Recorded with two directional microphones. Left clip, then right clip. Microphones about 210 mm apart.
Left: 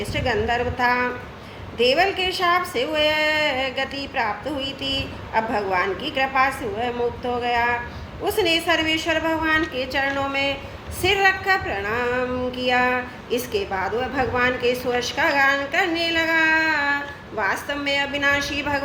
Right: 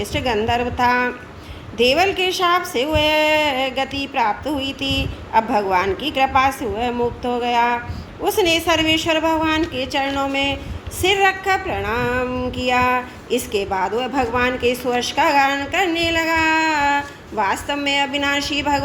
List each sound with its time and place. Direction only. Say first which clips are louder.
0.0 s a woman's voice: right 3 dB; 55° right (ahead or behind)